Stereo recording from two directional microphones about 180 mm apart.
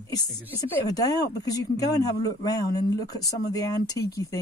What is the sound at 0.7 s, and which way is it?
Speech, 20° left (ahead or behind).